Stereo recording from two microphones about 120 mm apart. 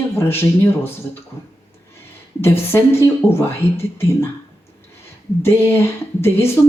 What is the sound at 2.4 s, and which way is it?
Speech, 20° left (ahead or behind).